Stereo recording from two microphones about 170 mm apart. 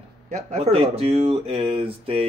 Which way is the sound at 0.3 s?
40° right (ahead or behind).